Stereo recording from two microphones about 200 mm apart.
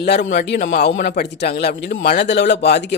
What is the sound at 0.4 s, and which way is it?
Speech, 55° left (ahead or behind).